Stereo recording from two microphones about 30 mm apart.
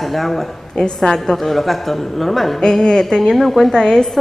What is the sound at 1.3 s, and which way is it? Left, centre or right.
A woman's voice, centre.